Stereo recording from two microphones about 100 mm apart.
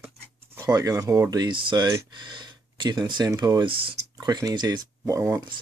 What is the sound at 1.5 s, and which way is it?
Speech, 50° right (ahead or behind).